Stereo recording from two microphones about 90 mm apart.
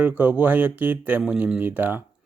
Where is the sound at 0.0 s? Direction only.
20° right (ahead or behind).